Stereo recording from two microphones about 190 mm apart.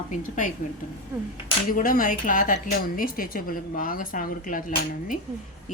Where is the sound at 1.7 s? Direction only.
45° left (ahead or behind).